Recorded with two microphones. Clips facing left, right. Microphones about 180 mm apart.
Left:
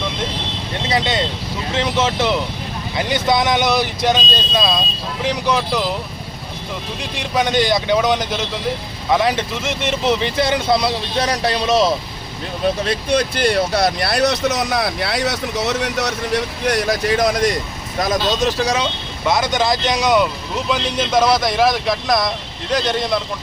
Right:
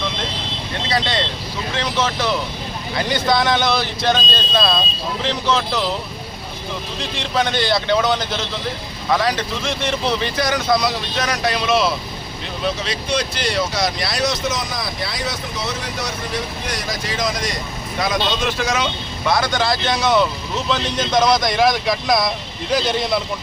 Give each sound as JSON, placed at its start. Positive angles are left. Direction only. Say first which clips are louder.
{"t": 0.9, "sound": "vehicle", "louder": "left 2 dB", "side_deg": 20}
{"t": 1.7, "sound": "speech", "louder": "left 3 dB", "side_deg": 25}
{"t": 7.0, "sound": "speech", "louder": "left 1 dB", "side_deg": 15}
{"t": 12.6, "sound": "speech", "louder": "left 5 dB", "side_deg": 50}
{"t": 18.3, "sound": "speech", "louder": "left 3 dB", "side_deg": 40}
{"t": 19.3, "sound": "speech", "louder": "left 2 dB", "side_deg": 20}